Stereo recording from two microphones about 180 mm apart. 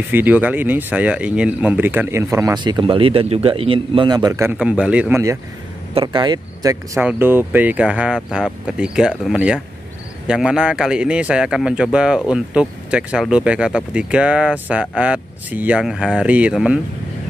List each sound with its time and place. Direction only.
0.1 s speech: 10° right (ahead or behind)
4.6 s speech: 5° right (ahead or behind)